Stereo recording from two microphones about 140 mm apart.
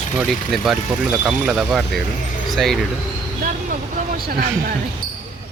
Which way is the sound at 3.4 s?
65° right (ahead or behind).